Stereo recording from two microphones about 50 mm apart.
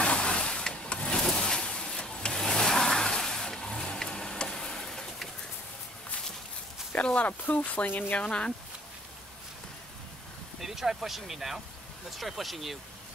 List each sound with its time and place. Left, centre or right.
0.0 s vehicle: centre
6.9 s a sound: left
7.2 s speech: left
8.2 s speech: left
10.6 s speech: centre